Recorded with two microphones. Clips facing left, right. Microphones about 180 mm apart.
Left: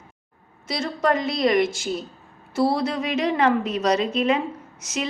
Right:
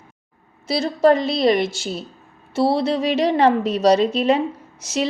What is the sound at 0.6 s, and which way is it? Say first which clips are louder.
A woman's voice: right 7 dB; 30° right (ahead or behind).